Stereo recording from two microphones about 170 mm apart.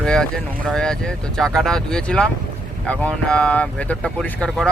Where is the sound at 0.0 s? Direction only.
5° left (ahead or behind).